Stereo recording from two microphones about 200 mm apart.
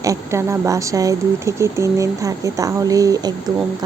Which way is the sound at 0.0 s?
15° right (ahead or behind).